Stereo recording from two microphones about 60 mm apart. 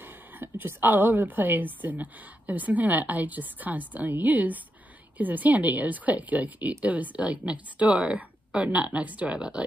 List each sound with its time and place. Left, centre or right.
0.4 s a woman's voice: right; by 9.6 s centre